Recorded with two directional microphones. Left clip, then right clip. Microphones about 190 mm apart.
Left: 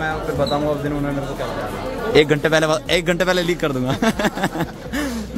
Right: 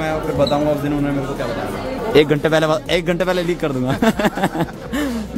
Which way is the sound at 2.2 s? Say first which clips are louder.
Right 1 dB; 5° right (ahead or behind).